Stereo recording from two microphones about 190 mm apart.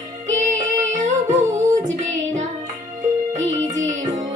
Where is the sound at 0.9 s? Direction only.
40° right (ahead or behind).